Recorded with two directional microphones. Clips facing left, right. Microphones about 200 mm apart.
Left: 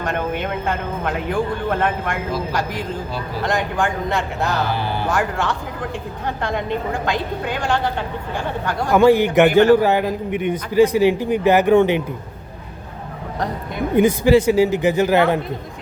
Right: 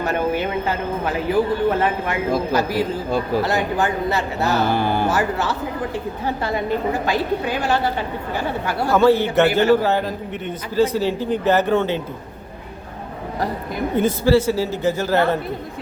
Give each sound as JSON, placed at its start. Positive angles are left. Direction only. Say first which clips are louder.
{"t": 0.0, "sound": "a woman's voice", "louder": "right 2 dB", "side_deg": -5}
{"t": 4.7, "sound": "speech", "louder": "right 4 dB", "side_deg": -50}
{"t": 5.0, "sound": "a woman's voice", "louder": "right 1 dB", "side_deg": -5}
{"t": 8.9, "sound": "a man's voice", "louder": "left 2 dB", "side_deg": 15}
{"t": 13.9, "sound": "a man's voice", "louder": "left 3 dB", "side_deg": 15}